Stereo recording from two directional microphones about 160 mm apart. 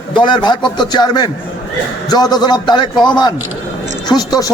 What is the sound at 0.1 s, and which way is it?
Speech, 30° left (ahead or behind).